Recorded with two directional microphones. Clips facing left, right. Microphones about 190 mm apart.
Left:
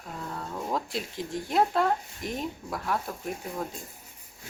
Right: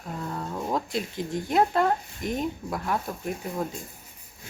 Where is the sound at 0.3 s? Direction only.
5° right (ahead or behind).